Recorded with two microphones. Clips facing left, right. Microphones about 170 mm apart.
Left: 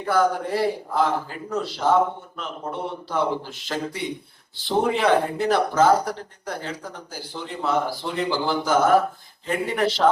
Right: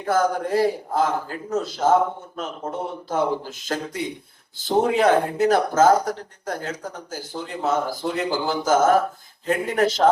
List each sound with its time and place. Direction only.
0.0 s speech: 45° right (ahead or behind)